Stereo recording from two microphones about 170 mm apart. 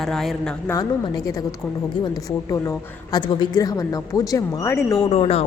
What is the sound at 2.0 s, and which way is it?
Speech, 20° left (ahead or behind).